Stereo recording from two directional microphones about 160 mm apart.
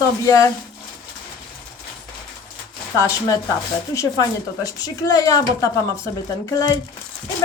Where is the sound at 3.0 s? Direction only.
20° left (ahead or behind).